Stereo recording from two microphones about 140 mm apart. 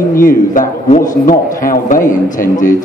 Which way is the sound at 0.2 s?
80° left.